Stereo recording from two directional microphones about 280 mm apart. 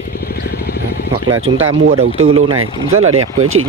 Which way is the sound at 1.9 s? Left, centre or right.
Right.